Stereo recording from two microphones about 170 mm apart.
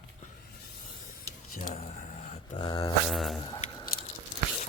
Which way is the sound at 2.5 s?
25° left (ahead or behind).